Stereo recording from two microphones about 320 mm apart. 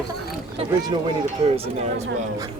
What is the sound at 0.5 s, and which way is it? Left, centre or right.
Speech, centre.